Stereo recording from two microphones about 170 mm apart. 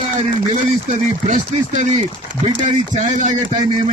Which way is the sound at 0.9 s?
45° right (ahead or behind).